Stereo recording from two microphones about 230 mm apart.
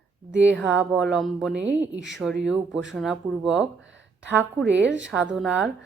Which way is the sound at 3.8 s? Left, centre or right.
Right.